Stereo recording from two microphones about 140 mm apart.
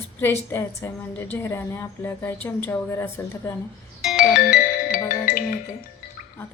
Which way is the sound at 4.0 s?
Centre (ahead or behind).